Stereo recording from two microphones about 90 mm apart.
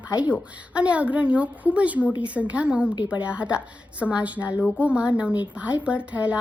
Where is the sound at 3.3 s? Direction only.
15° right (ahead or behind).